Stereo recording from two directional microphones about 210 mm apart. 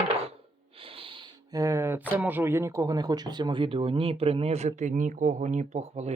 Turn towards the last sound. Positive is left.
turn(degrees=-30)  # may be behind; listen again after turning